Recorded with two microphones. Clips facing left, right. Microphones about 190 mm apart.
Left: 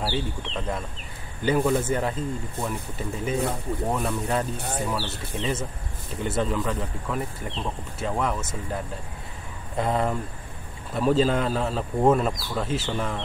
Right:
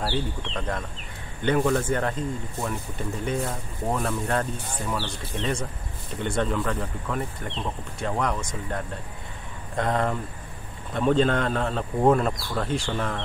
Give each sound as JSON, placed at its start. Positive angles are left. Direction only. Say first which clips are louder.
{"t": 0.0, "sound": "speech", "louder": "even", "side_deg": 5}
{"t": 4.6, "sound": "speech", "louder": "left 5 dB", "side_deg": 65}
{"t": 4.9, "sound": "speech", "louder": "even", "side_deg": 5}